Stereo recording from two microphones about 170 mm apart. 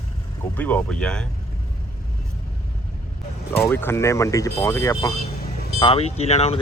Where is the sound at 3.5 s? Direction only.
15° left (ahead or behind).